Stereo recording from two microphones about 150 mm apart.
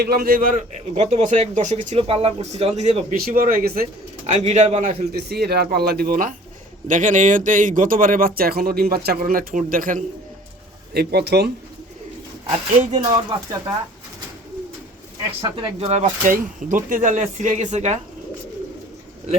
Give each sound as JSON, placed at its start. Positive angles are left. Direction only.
{"t": 0.0, "sound": "a man's voice", "side_deg": -90}
{"t": 3.2, "sound": "speech", "side_deg": -75}
{"t": 4.3, "sound": "speech", "side_deg": -50}
{"t": 10.9, "sound": "speech", "side_deg": -90}
{"t": 12.5, "sound": "a man's voice", "side_deg": -45}
{"t": 15.4, "sound": "speech", "side_deg": -30}
{"t": 15.8, "sound": "a man's voice", "side_deg": -45}
{"t": 16.3, "sound": "a man's voice", "side_deg": -60}